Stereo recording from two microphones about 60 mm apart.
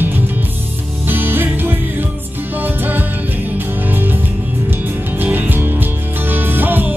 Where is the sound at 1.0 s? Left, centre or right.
Right.